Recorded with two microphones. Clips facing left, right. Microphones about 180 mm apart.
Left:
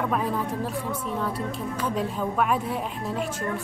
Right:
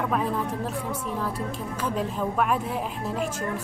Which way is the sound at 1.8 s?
Centre (ahead or behind).